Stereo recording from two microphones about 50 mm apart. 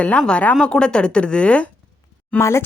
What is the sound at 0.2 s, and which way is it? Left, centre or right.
A woman's voice, centre.